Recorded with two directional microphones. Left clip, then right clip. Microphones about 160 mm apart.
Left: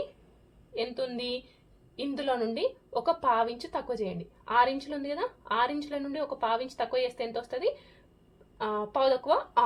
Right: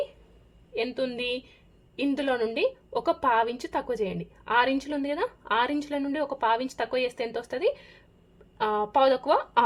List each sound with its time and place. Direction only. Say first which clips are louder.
0.7 s a woman's voice: right 3 dB; 50° right (ahead or behind)